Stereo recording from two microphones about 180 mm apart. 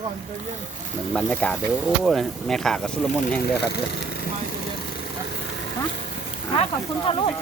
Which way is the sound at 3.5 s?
65° left (ahead or behind).